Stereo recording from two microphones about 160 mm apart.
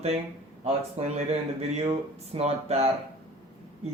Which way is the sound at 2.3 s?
40° right (ahead or behind).